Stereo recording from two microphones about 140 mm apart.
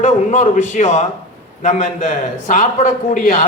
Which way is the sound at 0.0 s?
60° left (ahead or behind).